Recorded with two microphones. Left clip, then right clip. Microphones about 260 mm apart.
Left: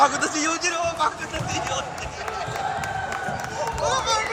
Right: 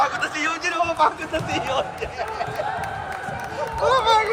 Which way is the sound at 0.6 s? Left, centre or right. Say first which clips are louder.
Right 7 dB; centre.